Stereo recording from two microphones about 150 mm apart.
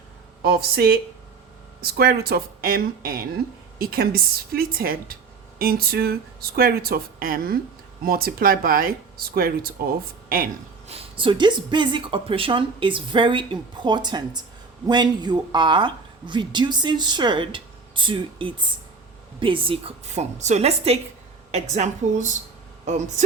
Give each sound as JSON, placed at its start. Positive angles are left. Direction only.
{"t": 0.4, "sound": "speech", "side_deg": -90}
{"t": 5.5, "sound": "speech", "side_deg": -90}
{"t": 10.2, "sound": "a woman's voice", "side_deg": -70}
{"t": 10.8, "sound": "a woman's voice", "side_deg": -40}